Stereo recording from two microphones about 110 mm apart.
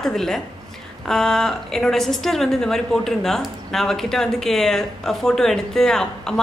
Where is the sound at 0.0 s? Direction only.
5° left (ahead or behind).